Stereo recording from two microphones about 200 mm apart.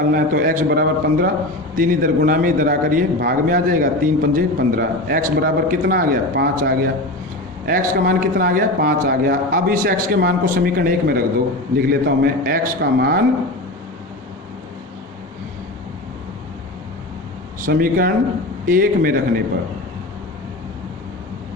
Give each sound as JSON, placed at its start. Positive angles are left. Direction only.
{"t": 0.1, "sound": "a man's voice", "side_deg": -45}
{"t": 17.7, "sound": "a man's voice", "side_deg": -50}